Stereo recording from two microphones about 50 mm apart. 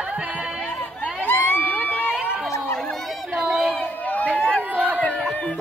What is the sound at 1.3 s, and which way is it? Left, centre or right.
Crowd, left.